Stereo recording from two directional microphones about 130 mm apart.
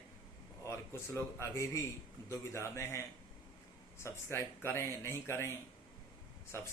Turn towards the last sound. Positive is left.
turn(degrees=20)  # may be behind; listen again after turning